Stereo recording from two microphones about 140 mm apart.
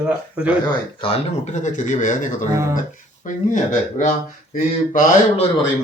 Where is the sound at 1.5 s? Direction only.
60° left (ahead or behind).